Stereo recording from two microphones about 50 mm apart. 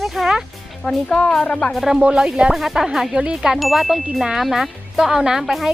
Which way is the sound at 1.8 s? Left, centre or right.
Centre.